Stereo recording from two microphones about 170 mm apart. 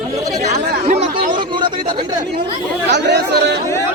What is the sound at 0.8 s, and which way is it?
Chatter, 40° right (ahead or behind).